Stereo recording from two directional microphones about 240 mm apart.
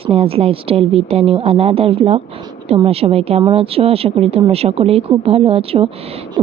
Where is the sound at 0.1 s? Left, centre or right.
Right.